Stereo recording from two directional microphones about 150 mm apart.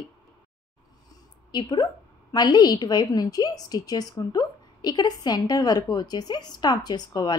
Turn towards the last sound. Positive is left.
turn(degrees=30)  # may be behind; listen again after turning